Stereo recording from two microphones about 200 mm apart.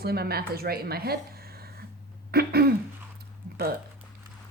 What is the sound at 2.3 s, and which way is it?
Throat clearing, 50° right (ahead or behind).